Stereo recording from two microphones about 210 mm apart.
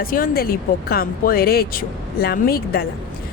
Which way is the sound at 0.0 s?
45° left (ahead or behind).